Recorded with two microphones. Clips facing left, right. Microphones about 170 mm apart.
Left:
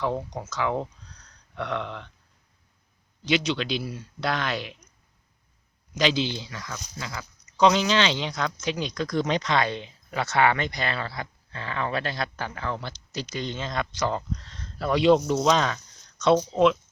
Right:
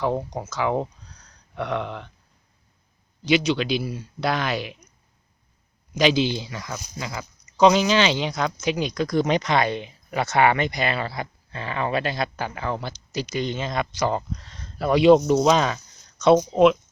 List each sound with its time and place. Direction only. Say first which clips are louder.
0.0 s speech: right 3 dB; 20° right (ahead or behind)
0.4 s speech: right 2 dB; 5° right (ahead or behind)
0.7 s a sound: right 4 dB; 10° right (ahead or behind)
3.2 s speech: right 4 dB; 5° right (ahead or behind)
6.0 s speech: right 5 dB; 10° right (ahead or behind)